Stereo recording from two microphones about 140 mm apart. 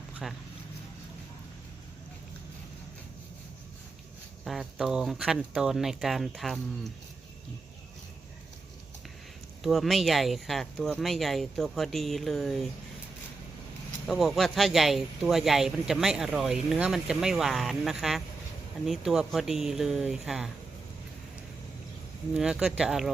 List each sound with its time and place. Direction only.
0.2 s speech: centre (ahead or behind)
4.4 s speech: centre (ahead or behind)
9.6 s speech: centre (ahead or behind)
14.1 s speech: centre (ahead or behind)
22.4 s speech: 5° right (ahead or behind)